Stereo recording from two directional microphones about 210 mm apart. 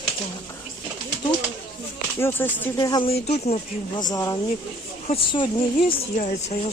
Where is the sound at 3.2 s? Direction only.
30° left (ahead or behind).